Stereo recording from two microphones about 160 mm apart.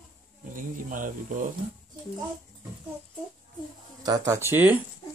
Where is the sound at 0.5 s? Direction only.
55° right (ahead or behind).